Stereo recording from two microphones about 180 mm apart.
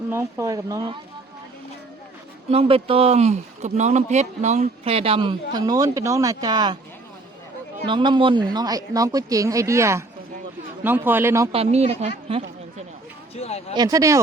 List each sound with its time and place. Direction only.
0.1 s speech: 15° right (ahead or behind)
2.5 s speech: 30° right (ahead or behind)
7.9 s speech: 25° right (ahead or behind)
11.5 s speech: 35° right (ahead or behind)
13.3 s a sound: 35° left (ahead or behind)
13.7 s speech: 20° right (ahead or behind)